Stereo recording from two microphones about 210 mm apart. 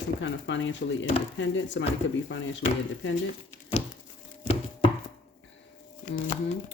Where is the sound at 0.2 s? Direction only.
60° left (ahead or behind).